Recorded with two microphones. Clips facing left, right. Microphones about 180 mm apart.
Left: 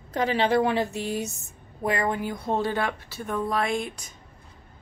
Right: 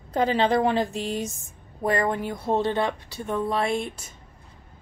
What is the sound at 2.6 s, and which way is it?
Speech, 25° right (ahead or behind).